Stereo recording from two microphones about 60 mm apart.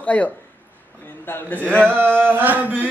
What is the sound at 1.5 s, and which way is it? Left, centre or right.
Speech, left.